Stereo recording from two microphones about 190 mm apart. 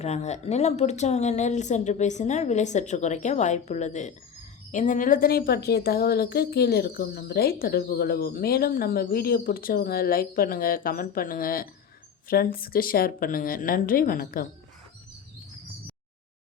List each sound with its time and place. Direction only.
0.0 s a woman's voice: 35° left (ahead or behind)